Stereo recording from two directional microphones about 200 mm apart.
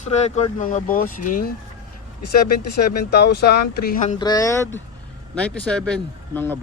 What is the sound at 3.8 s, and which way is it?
Speech, 40° left (ahead or behind).